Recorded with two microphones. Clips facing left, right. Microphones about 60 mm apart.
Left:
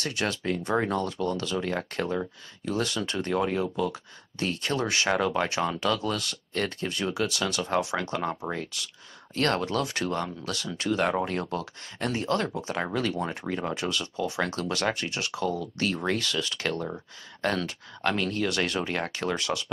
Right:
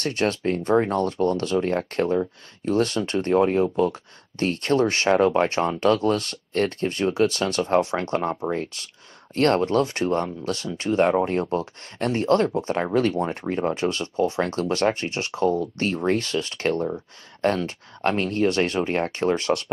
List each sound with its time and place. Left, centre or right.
0.0 s speech: right
13.6 s speech: right